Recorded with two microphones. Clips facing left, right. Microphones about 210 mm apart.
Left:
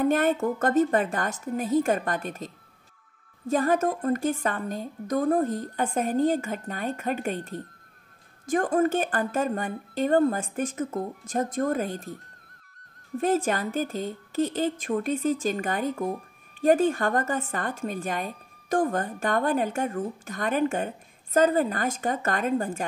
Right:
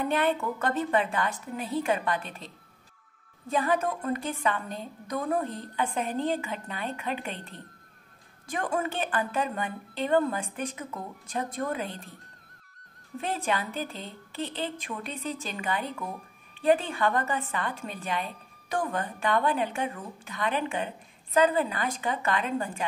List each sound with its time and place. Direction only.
0.0 s a woman's voice: 45° left (ahead or behind)
13.2 s a woman's voice: 45° left (ahead or behind)